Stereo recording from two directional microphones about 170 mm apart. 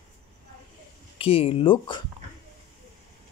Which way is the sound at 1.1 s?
35° left (ahead or behind).